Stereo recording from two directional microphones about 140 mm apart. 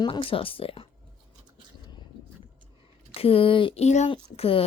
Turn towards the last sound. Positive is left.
turn(degrees=40)  # may be behind; listen again after turning